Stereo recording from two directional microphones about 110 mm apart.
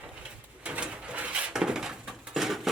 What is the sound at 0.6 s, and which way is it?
Bird, 10° right (ahead or behind).